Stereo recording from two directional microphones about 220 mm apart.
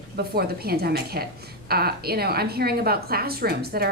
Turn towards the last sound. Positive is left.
turn(degrees=-45)  # may be behind; listen again after turning